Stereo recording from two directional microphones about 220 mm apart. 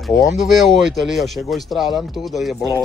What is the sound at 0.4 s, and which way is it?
Speech, centre (ahead or behind).